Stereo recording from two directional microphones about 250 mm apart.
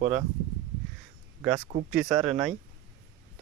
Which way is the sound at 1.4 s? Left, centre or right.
Centre.